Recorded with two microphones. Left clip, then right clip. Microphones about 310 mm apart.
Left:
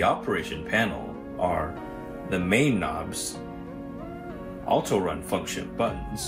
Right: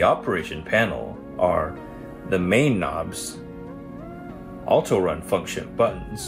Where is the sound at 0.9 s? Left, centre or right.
Right.